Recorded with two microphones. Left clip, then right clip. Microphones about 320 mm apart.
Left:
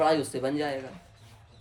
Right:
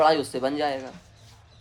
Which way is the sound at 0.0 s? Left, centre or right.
Centre.